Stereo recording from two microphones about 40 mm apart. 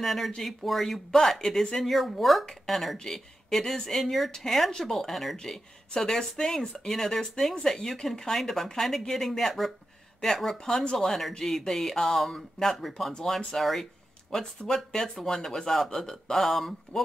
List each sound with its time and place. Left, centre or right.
0.0 s speech: centre
11.0 s speech: centre